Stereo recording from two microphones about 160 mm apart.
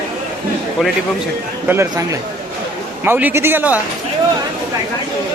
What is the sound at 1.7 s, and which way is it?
Speech, 15° right (ahead or behind).